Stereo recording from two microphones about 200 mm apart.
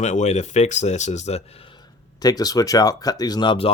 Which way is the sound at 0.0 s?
35° left (ahead or behind).